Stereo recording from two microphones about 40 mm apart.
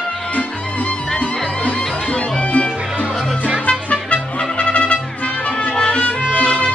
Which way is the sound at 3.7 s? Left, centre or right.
Left.